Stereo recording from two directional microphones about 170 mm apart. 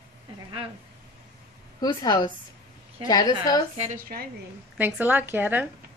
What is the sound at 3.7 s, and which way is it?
Speech, 45° right (ahead or behind).